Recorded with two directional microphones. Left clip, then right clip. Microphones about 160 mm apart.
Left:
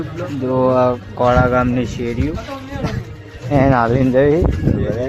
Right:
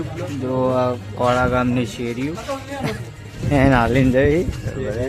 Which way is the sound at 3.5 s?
15° right (ahead or behind).